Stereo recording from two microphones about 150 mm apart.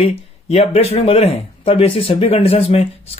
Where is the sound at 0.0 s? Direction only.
40° left (ahead or behind).